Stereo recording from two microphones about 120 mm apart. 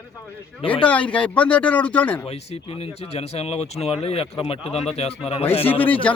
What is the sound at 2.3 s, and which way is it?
Speech, 60° left (ahead or behind).